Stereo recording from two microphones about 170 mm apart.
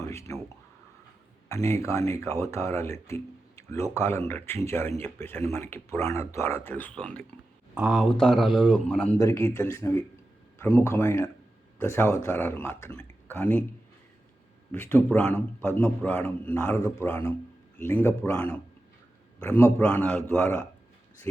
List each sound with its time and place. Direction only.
0.0 s speech: 20° left (ahead or behind)
1.5 s a man's voice: 15° left (ahead or behind)
14.7 s a man's voice: 15° left (ahead or behind)